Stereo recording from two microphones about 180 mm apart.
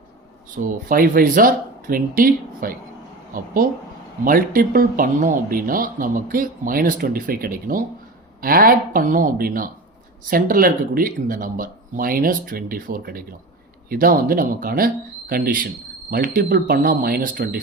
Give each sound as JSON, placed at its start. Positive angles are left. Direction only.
{"t": 0.5, "sound": "speech", "side_deg": -50}